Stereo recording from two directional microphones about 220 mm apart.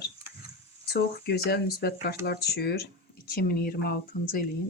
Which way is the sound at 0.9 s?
45° left (ahead or behind).